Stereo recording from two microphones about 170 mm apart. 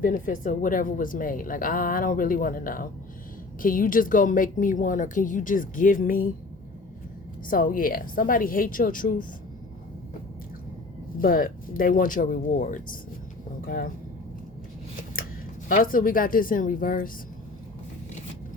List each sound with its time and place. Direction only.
0.0 s a woman's voice: 50° left (ahead or behind)
7.4 s a woman's voice: 55° left (ahead or behind)
11.2 s a woman's voice: 55° left (ahead or behind)
15.7 s a woman's voice: 55° left (ahead or behind)